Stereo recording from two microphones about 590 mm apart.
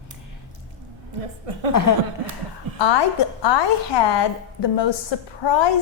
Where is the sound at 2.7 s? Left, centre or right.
Left.